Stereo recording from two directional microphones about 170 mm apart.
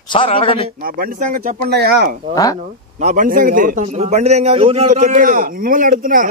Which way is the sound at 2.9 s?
50° right (ahead or behind).